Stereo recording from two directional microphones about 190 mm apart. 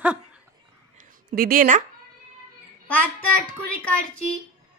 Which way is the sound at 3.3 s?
5° left (ahead or behind).